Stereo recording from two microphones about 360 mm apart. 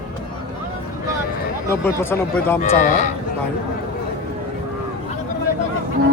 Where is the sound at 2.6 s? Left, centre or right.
Left.